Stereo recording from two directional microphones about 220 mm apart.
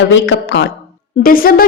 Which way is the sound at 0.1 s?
55° left (ahead or behind).